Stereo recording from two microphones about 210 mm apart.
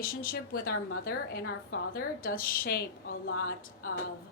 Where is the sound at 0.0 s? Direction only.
45° left (ahead or behind).